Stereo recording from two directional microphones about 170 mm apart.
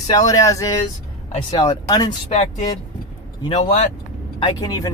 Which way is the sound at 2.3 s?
40° left (ahead or behind).